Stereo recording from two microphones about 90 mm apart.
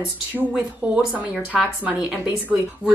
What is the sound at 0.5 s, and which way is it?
A woman's voice, 15° right (ahead or behind).